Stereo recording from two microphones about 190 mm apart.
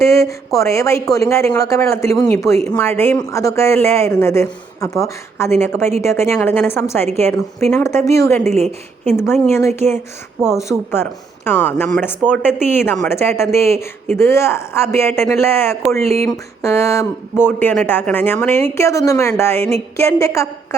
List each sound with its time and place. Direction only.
0.0 s speech: 15° left (ahead or behind)
8.4 s a woman's voice: 35° right (ahead or behind)
9.0 s speech: 10° left (ahead or behind)